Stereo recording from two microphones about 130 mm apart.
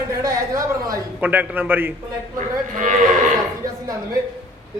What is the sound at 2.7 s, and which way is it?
Speech, 75° right (ahead or behind).